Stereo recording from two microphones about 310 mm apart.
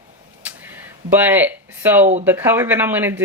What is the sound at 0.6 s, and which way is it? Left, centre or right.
Speech, centre.